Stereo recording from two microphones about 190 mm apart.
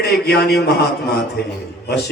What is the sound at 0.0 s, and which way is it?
A man's voice, 60° left (ahead or behind).